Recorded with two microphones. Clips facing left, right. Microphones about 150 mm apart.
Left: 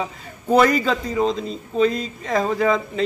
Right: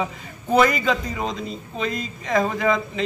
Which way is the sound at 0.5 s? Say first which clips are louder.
Left 2 dB; 35° left (ahead or behind).